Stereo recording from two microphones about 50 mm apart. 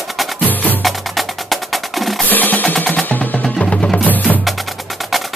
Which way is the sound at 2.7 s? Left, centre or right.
Centre.